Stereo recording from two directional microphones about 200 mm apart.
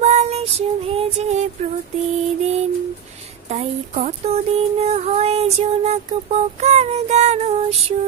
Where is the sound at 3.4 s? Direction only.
35° right (ahead or behind).